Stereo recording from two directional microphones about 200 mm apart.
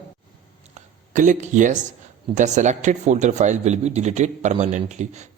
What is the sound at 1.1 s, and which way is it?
A man's voice, 40° right (ahead or behind).